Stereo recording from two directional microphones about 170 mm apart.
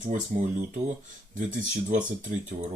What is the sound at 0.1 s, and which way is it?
Speech, 50° right (ahead or behind).